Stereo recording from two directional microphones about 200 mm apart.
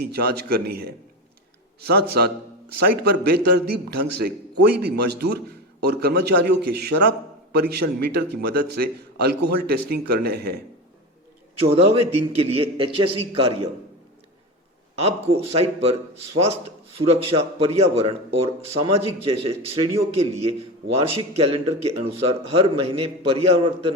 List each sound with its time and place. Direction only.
0.0 s a man's voice: 50° right (ahead or behind)
11.5 s a man's voice: 30° right (ahead or behind)
15.5 s a man's voice: 30° right (ahead or behind)